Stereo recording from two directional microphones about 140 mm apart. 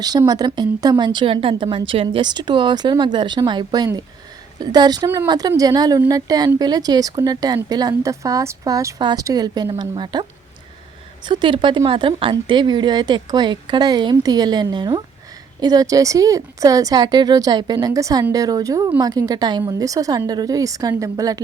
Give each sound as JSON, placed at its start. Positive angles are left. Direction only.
{"t": 0.3, "sound": "a woman's voice", "side_deg": -30}
{"t": 11.3, "sound": "a woman's voice", "side_deg": -35}